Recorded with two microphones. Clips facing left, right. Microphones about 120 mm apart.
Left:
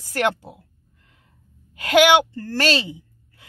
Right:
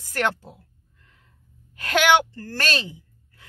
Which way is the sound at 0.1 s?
15° left (ahead or behind).